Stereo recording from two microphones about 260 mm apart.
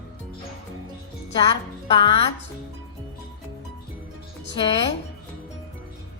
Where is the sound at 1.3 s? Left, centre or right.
Centre.